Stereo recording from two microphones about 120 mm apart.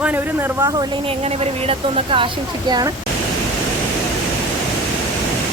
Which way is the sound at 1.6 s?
55° right (ahead or behind).